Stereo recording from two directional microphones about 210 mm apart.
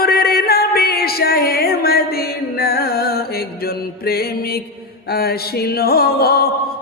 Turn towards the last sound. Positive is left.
turn(degrees=45)  # may be behind; listen again after turning